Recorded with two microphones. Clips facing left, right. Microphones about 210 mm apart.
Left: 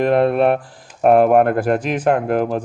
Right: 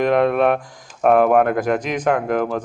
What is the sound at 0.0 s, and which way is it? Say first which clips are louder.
Speech: left 1 dB; 35° left (ahead or behind).